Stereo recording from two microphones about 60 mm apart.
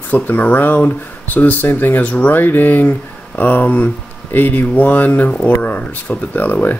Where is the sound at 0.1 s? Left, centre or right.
Left.